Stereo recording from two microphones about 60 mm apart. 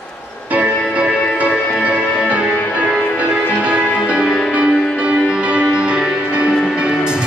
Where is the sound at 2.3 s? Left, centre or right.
Centre.